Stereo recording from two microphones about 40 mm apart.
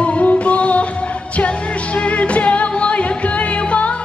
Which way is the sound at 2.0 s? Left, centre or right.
Left.